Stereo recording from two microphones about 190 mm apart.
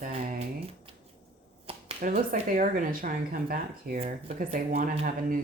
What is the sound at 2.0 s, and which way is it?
Speech, 45° right (ahead or behind).